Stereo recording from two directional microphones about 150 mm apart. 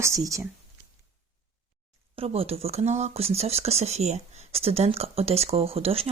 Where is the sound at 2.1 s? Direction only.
40° right (ahead or behind).